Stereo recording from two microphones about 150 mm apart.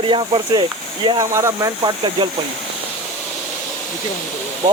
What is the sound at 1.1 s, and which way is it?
Speech, 20° right (ahead or behind).